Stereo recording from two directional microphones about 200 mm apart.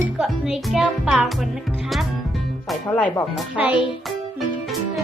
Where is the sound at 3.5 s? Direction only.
5° right (ahead or behind).